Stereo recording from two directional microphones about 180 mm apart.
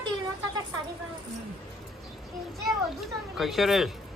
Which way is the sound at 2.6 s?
Centre (ahead or behind).